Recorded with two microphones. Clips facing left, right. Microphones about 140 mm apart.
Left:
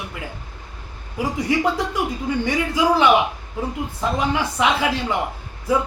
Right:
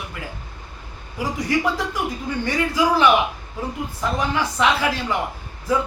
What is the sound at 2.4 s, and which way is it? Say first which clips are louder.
A man's voice: even; 15° left (ahead or behind).